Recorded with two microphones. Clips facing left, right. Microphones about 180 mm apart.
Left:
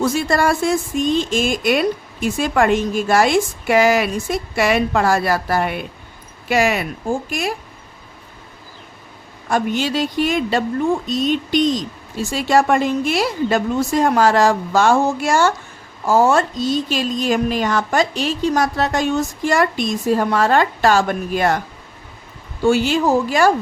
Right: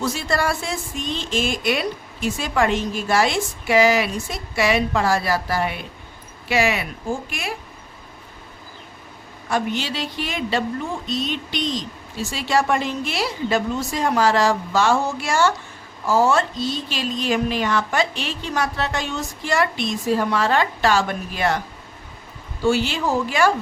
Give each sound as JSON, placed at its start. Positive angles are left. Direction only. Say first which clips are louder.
{"t": 0.0, "sound": "speech", "louder": "left 5 dB", "side_deg": 50}
{"t": 9.5, "sound": "speech", "louder": "left 4 dB", "side_deg": 45}
{"t": 22.6, "sound": "speech", "louder": "left 5 dB", "side_deg": 50}